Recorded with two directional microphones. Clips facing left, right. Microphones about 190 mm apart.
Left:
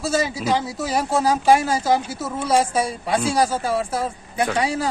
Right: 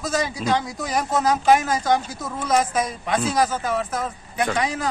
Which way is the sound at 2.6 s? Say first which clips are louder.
Left 2 dB; 30° left (ahead or behind).